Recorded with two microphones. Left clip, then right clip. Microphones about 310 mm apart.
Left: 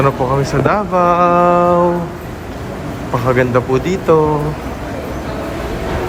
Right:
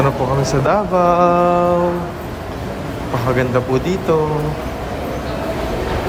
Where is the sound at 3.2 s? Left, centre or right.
Centre.